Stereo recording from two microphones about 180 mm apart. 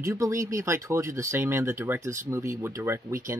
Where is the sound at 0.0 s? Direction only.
15° right (ahead or behind).